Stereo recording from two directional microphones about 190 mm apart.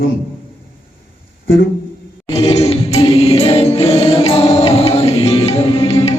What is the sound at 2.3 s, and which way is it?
Music, 30° left (ahead or behind).